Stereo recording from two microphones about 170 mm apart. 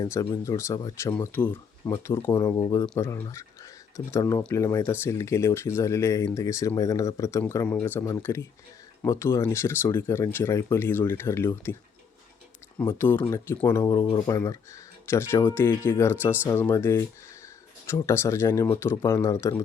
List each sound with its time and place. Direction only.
0.0 s speech: 20° left (ahead or behind)
12.8 s speech: 10° left (ahead or behind)